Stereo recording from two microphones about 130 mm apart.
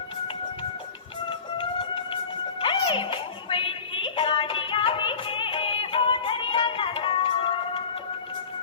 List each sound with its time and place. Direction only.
2.6 s music: 40° left (ahead or behind)